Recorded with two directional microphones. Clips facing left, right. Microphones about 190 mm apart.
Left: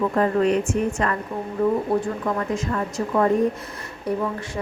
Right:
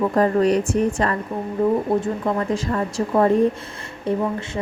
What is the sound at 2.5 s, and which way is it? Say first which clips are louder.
A woman's voice: right 2 dB; 30° right (ahead or behind).